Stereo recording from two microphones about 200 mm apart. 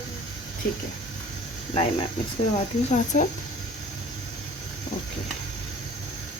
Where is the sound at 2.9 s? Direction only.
35° left (ahead or behind).